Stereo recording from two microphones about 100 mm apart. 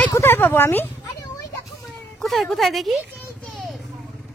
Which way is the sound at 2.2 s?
Centre (ahead or behind).